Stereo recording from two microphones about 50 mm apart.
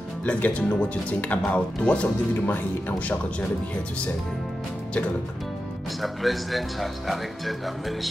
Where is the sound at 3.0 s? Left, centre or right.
Left.